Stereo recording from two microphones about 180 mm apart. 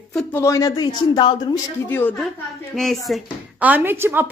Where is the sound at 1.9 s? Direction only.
10° left (ahead or behind).